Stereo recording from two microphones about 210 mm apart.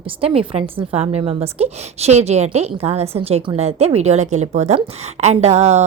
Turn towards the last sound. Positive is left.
turn(degrees=-30)  # may be behind; listen again after turning